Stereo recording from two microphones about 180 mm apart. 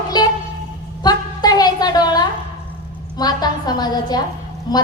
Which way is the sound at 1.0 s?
20° left (ahead or behind).